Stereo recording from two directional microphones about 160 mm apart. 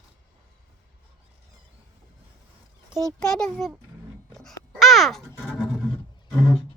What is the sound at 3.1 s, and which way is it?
Speech, 5° left (ahead or behind).